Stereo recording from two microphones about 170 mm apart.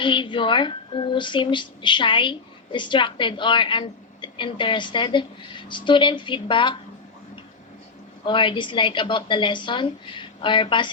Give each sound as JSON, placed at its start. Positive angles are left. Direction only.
{"t": 0.0, "sound": "a woman's voice", "side_deg": 30}
{"t": 8.2, "sound": "a woman's voice", "side_deg": 30}